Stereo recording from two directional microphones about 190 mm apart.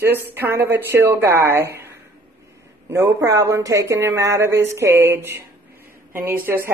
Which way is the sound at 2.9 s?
15° right (ahead or behind).